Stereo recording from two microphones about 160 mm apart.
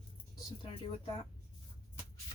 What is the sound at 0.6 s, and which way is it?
Speech, 30° left (ahead or behind).